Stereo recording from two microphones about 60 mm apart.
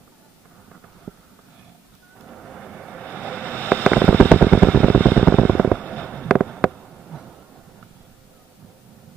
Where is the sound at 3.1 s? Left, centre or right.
Left.